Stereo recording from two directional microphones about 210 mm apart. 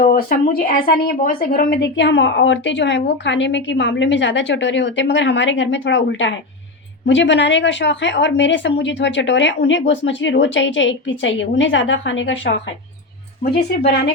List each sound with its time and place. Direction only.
0.1 s a woman's voice: 45° left (ahead or behind); by 12.5 s 60° left (ahead or behind)
13.4 s speech: 50° left (ahead or behind)